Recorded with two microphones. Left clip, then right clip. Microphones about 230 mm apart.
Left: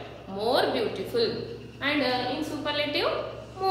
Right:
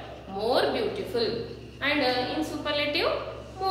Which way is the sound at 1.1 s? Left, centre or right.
Centre.